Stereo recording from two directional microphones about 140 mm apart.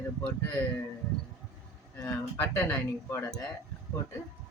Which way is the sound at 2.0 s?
20° left (ahead or behind).